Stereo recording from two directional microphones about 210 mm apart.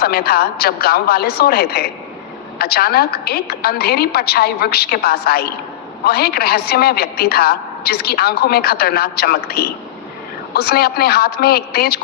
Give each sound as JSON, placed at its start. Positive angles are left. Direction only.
{"t": 0.0, "sound": "a woman's voice", "side_deg": 50}